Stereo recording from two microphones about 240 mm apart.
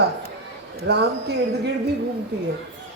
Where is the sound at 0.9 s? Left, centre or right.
Right.